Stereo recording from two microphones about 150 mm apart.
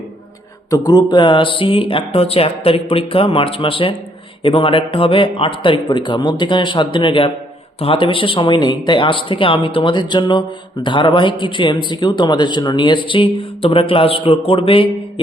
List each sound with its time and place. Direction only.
0.7 s a man's voice: 25° left (ahead or behind)